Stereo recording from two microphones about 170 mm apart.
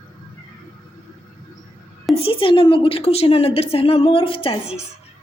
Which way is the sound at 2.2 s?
30° left (ahead or behind).